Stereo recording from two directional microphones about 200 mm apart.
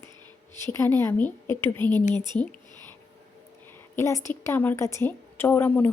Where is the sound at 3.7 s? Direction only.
10° left (ahead or behind).